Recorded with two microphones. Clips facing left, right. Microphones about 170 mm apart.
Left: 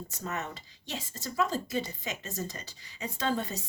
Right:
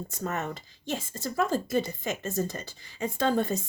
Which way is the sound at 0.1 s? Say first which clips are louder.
Right 5 dB; 50° right (ahead or behind).